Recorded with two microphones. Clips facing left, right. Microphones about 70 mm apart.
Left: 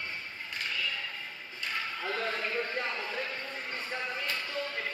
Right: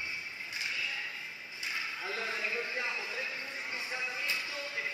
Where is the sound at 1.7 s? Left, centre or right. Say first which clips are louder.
Left 4 dB; left.